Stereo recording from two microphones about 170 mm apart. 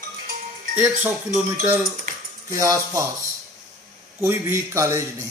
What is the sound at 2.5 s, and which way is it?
Speech, 20° right (ahead or behind).